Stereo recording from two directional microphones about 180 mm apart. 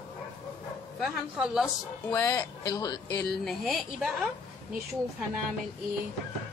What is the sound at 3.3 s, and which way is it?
A woman's voice, centre (ahead or behind).